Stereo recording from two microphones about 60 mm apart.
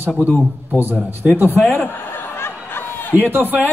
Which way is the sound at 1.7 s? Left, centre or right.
Left.